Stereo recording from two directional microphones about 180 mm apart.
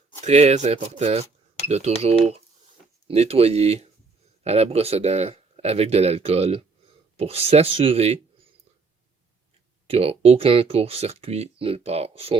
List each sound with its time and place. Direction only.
0.2 s speech: 35° right (ahead or behind)
9.8 s speech: 35° right (ahead or behind)